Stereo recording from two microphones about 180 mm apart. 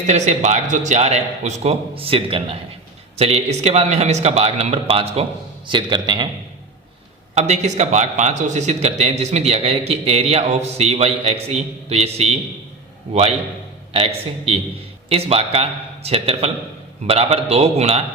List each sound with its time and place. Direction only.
0.1 s a man's voice: 40° right (ahead or behind)
7.3 s a man's voice: 40° right (ahead or behind)
13.9 s a man's voice: 30° right (ahead or behind)